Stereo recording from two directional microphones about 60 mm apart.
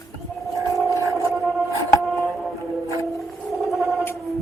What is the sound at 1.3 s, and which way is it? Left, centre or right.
Music, centre.